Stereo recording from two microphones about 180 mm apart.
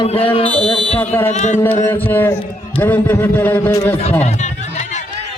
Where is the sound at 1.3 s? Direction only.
40° left (ahead or behind).